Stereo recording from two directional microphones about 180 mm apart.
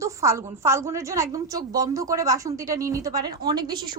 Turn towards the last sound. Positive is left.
turn(degrees=-25)  # may be behind; listen again after turning